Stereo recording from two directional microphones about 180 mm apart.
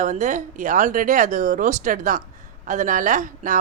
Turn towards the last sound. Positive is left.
turn(degrees=-45)  # may be behind; listen again after turning